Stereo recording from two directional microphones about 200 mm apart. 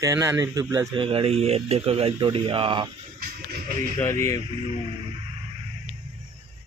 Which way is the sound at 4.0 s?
15° left (ahead or behind).